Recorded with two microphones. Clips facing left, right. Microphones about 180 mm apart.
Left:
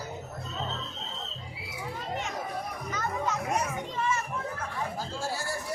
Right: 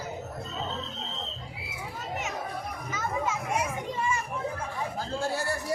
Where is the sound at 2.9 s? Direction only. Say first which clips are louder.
Right 1 dB; 10° right (ahead or behind).